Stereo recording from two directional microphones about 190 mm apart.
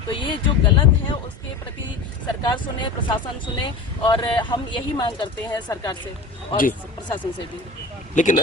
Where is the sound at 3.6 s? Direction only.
25° left (ahead or behind).